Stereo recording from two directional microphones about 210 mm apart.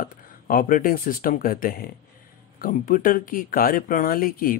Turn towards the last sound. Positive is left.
turn(degrees=40)  # may be behind; listen again after turning